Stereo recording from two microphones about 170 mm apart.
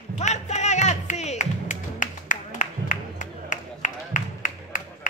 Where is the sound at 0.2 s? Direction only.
40° left (ahead or behind).